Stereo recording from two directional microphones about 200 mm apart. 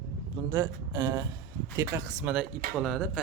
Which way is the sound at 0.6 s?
20° right (ahead or behind).